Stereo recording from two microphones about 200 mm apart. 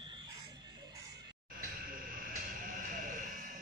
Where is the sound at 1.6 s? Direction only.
45° right (ahead or behind).